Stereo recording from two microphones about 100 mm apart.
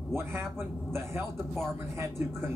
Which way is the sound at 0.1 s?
25° right (ahead or behind).